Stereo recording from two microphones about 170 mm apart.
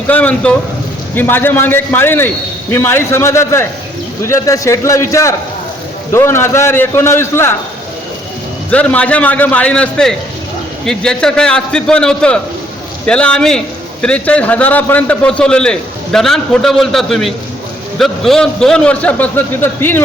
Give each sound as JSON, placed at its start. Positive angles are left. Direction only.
{"t": 0.1, "sound": "a man's voice", "side_deg": 10}
{"t": 8.7, "sound": "a man's voice", "side_deg": 10}